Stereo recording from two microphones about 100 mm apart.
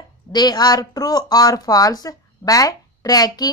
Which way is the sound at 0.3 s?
45° left (ahead or behind).